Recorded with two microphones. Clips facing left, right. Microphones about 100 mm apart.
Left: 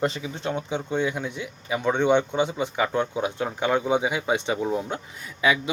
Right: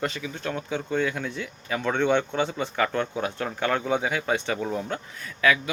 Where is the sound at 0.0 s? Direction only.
25° left (ahead or behind).